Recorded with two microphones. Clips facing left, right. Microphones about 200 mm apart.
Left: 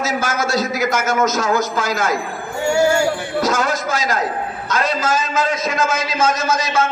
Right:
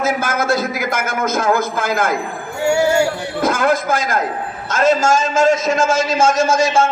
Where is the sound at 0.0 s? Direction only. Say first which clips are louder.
Right 2 dB; 55° right (ahead or behind).